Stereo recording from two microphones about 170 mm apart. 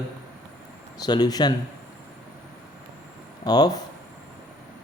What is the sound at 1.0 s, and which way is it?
Speech, 25° left (ahead or behind).